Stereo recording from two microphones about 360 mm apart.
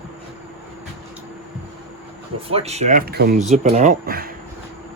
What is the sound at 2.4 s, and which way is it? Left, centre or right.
Speech, centre.